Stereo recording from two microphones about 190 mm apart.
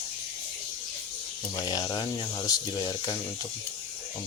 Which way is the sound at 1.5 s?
20° left (ahead or behind).